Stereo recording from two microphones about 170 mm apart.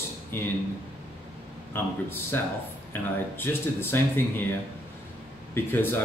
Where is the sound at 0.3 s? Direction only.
10° left (ahead or behind).